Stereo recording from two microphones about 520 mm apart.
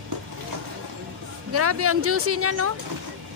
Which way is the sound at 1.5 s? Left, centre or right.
Right.